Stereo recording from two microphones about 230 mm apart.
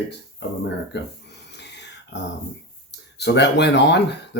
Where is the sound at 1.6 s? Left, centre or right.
Left.